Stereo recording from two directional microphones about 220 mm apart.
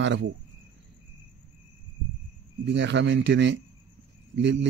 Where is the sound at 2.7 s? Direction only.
55° right (ahead or behind).